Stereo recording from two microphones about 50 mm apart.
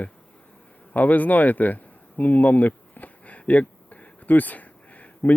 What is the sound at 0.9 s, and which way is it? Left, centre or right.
Speech, left.